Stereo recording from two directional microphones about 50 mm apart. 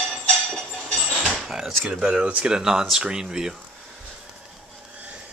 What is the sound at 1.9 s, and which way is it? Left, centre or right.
Speech, centre.